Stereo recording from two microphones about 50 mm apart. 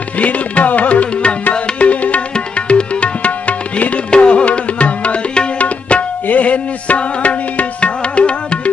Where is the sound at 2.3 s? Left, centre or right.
Left.